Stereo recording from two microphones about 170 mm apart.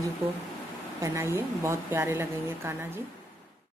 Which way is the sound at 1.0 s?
15° right (ahead or behind).